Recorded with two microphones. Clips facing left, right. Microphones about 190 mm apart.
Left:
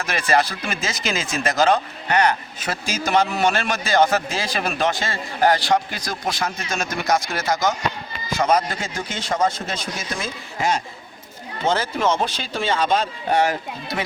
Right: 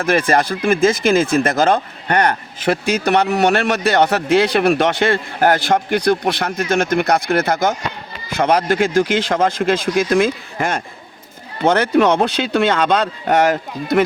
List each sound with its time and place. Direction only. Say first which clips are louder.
0.0 s speech: right 5 dB; 55° right (ahead or behind); by 10.3 s 90° right
10.6 s speech: even; 55° right (ahead or behind)